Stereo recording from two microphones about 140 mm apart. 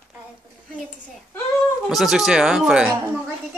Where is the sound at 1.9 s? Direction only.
Centre (ahead or behind).